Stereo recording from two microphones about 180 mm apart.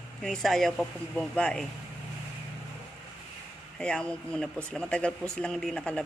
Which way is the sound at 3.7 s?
5° left (ahead or behind).